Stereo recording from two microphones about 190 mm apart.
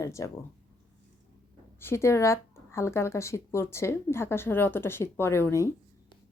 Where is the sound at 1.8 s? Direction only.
15° left (ahead or behind).